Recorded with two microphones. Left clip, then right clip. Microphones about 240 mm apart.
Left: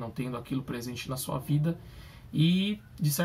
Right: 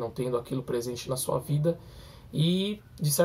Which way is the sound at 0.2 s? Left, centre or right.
Centre.